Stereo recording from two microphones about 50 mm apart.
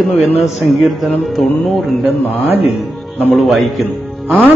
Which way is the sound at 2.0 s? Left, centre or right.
Right.